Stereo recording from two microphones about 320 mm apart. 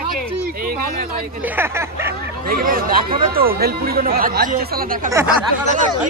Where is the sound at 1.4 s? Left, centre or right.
Centre.